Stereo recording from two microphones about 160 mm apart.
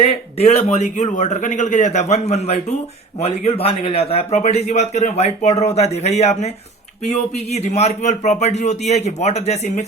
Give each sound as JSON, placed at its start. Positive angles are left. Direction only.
{"t": 0.3, "sound": "a man's voice", "side_deg": 40}